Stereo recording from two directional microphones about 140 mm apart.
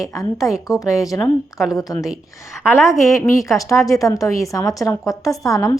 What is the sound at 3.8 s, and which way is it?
A woman's voice, 25° left (ahead or behind).